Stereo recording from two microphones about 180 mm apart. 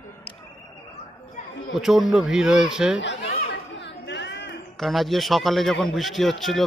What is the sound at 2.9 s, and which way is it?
Chatter, 90° left.